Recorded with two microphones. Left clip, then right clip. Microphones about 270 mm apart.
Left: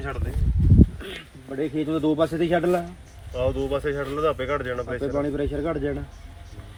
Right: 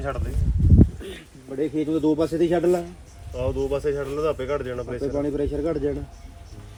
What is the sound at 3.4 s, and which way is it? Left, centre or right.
Speech, centre.